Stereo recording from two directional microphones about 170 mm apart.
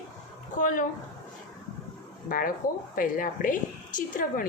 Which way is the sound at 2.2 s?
55° left (ahead or behind).